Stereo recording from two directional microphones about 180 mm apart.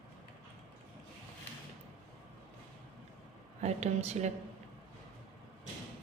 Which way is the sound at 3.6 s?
35° right (ahead or behind).